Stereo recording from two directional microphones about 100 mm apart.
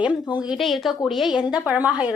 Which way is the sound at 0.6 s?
Centre (ahead or behind).